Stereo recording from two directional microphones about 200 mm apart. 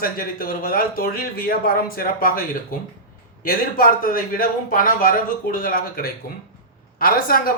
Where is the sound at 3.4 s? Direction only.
45° left (ahead or behind).